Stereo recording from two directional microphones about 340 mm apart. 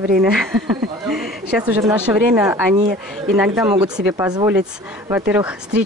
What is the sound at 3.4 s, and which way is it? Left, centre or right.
Speech, centre.